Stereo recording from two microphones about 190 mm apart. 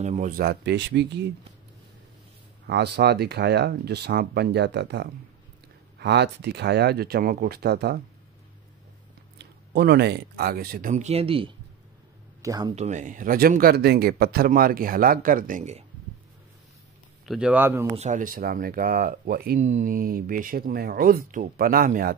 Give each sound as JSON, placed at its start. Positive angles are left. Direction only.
{"t": 0.0, "sound": "speech", "side_deg": -35}
{"t": 0.4, "sound": "speech", "side_deg": -60}
{"t": 2.6, "sound": "speech", "side_deg": -60}
{"t": 9.7, "sound": "speech", "side_deg": -60}
{"t": 12.4, "sound": "speech", "side_deg": -20}
{"t": 12.7, "sound": "speech", "side_deg": -35}
{"t": 17.3, "sound": "speech", "side_deg": -5}
{"t": 17.9, "sound": "speech", "side_deg": -40}
{"t": 19.6, "sound": "speech", "side_deg": -40}